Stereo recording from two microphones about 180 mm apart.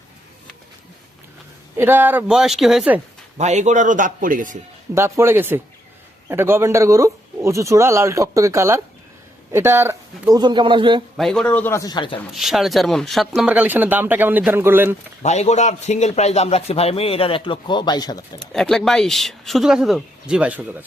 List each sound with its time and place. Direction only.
1.7 s speech: 10° right (ahead or behind)
3.3 s a man's voice: 40° right (ahead or behind)
4.9 s a man's voice: 15° right (ahead or behind)
11.2 s a man's voice: 5° left (ahead or behind); by 12.2 s 25° left (ahead or behind)
12.3 s speech: centre (ahead or behind)
15.2 s a man's voice: 40° left (ahead or behind); by 18.2 s 20° left (ahead or behind)
18.5 s speech: 5° left (ahead or behind)